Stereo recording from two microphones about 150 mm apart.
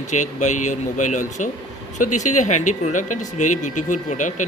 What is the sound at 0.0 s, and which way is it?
Speech, 55° left (ahead or behind).